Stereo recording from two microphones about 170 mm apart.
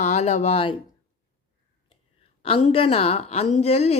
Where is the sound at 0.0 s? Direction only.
40° left (ahead or behind).